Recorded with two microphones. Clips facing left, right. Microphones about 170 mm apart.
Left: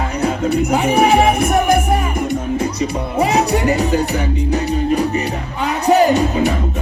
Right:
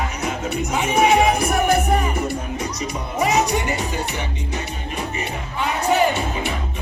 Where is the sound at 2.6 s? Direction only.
30° left (ahead or behind).